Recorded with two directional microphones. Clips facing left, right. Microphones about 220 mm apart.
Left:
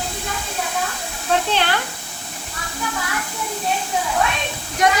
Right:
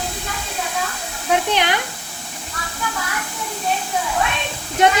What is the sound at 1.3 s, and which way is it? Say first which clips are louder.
Speech: right 1 dB; 15° right (ahead or behind).